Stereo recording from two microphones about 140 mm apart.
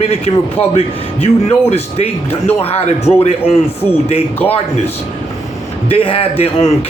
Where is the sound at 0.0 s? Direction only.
50° left (ahead or behind).